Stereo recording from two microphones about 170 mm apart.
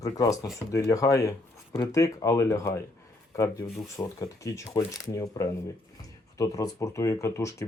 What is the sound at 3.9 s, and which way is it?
Speech, 20° left (ahead or behind).